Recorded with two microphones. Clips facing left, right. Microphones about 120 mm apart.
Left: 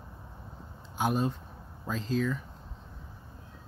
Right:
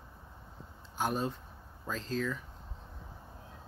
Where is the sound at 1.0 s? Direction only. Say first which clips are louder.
Left 4 dB; 5° left (ahead or behind).